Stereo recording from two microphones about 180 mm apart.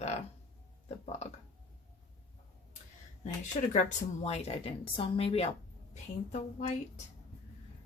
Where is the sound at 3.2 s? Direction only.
40° left (ahead or behind).